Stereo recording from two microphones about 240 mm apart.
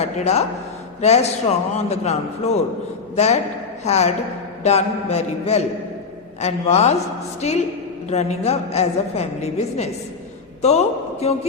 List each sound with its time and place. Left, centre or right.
0.0 s a woman's voice: left
3.8 s a woman's voice: left